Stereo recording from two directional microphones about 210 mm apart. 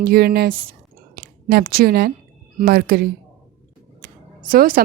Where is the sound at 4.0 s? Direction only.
45° right (ahead or behind).